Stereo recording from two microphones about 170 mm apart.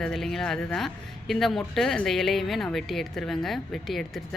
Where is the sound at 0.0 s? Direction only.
Centre (ahead or behind).